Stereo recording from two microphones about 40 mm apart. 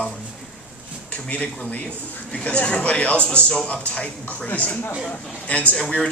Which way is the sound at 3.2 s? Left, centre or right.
Left.